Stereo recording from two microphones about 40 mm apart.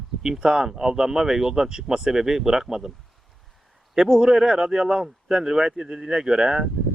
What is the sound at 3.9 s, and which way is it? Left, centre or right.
Speech, centre.